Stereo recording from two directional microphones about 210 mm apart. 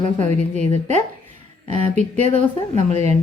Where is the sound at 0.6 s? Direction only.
35° right (ahead or behind).